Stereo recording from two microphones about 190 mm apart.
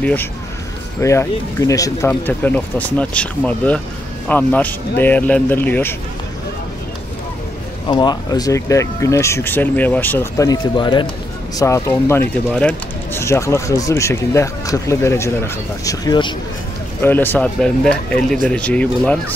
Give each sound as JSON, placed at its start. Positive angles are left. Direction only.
{"t": 0.0, "sound": "speech", "side_deg": 10}
{"t": 7.9, "sound": "speech", "side_deg": 20}
{"t": 17.0, "sound": "speech", "side_deg": 10}